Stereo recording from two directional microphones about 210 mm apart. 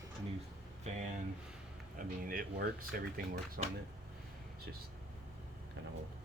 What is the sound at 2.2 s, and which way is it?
Speech, 45° right (ahead or behind).